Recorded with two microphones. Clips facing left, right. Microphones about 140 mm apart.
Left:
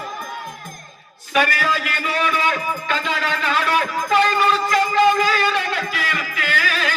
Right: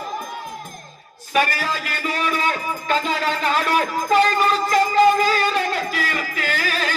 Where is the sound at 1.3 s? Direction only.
40° right (ahead or behind).